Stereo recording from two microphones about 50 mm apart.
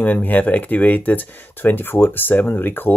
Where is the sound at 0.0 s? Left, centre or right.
Left.